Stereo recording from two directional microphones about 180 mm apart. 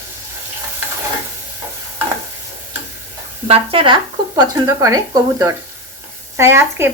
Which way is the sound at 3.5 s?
30° right (ahead or behind).